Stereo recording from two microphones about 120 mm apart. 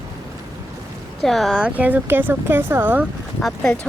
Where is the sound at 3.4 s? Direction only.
Centre (ahead or behind).